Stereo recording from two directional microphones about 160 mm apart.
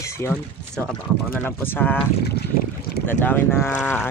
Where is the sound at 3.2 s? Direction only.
15° left (ahead or behind).